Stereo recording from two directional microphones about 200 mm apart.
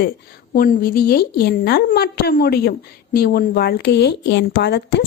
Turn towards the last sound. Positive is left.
turn(degrees=60)  # may be behind; listen again after turning